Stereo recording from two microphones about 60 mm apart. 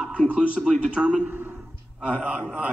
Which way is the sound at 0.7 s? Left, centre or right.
Centre.